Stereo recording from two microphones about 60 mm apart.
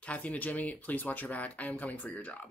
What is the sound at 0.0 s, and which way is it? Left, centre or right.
Speech, left.